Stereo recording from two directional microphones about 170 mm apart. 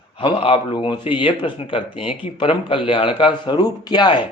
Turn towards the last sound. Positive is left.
turn(degrees=25)  # may be behind; listen again after turning